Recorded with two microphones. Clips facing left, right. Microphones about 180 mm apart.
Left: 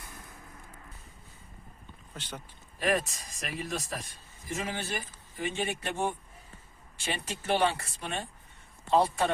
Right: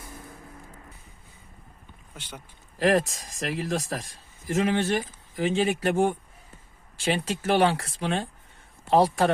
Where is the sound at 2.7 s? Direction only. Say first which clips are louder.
Right 7 dB; 90° right.